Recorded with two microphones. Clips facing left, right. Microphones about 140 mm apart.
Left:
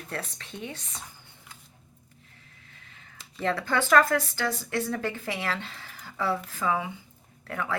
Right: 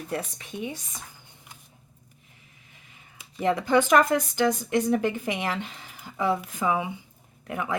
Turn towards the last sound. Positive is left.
turn(degrees=-15)  # may be behind; listen again after turning